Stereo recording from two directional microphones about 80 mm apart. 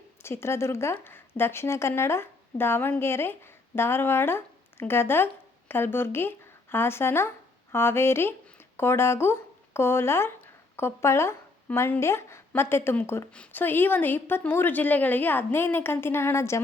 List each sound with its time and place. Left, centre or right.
0.2 s a woman's voice: left